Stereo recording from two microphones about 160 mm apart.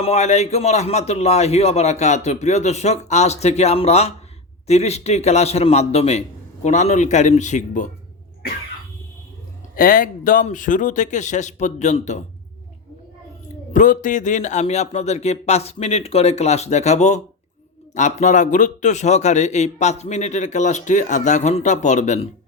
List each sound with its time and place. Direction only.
0.0 s a man's voice: 40° left (ahead or behind)
9.7 s a man's voice: 60° left (ahead or behind)
13.7 s a man's voice: 55° left (ahead or behind)